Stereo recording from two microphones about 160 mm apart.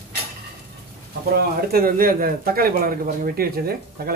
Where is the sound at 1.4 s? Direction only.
70° right (ahead or behind).